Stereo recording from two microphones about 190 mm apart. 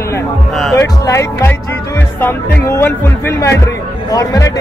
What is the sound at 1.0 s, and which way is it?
Speech, 15° left (ahead or behind).